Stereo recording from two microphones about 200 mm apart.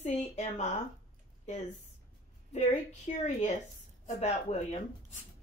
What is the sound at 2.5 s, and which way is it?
Speech, 35° left (ahead or behind).